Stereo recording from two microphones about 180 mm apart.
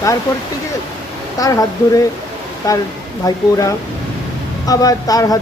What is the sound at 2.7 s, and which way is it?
Speech, 20° left (ahead or behind).